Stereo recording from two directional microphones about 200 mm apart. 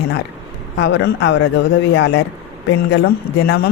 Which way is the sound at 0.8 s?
60° left (ahead or behind).